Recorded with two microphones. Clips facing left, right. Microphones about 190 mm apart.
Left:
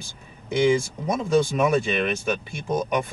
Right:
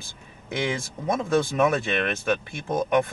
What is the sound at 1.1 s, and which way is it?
Speech, centre (ahead or behind).